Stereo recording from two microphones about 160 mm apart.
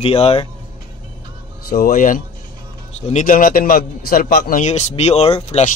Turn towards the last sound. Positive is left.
turn(degrees=40)  # may be behind; listen again after turning